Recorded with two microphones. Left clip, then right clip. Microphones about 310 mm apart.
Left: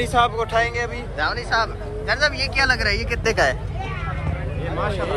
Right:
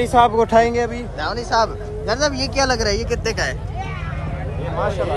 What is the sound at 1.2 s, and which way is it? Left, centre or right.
Speech, centre.